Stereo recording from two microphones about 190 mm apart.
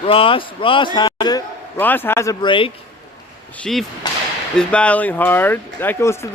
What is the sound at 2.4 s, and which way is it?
Speech, 25° left (ahead or behind).